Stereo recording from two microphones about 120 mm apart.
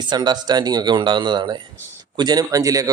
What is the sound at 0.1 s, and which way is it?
Speech, 35° right (ahead or behind).